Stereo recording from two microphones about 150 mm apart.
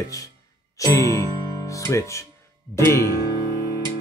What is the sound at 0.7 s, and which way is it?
Speech, 20° left (ahead or behind).